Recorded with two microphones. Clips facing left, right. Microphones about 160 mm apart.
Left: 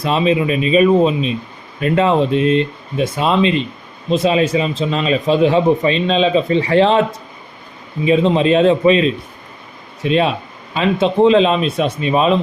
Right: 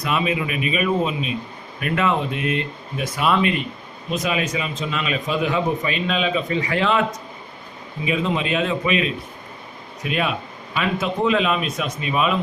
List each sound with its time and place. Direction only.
0.0 s a man's voice: 30° left (ahead or behind)
8.0 s a man's voice: 30° left (ahead or behind)